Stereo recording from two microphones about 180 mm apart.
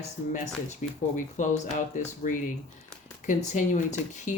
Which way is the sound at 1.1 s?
45° left (ahead or behind).